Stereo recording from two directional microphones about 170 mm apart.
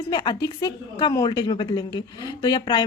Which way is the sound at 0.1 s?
25° left (ahead or behind).